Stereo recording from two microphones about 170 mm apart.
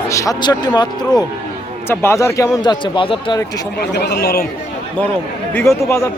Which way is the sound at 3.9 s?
80° left.